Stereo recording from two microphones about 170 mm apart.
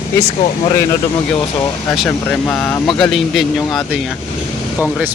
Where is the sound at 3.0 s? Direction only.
Centre (ahead or behind).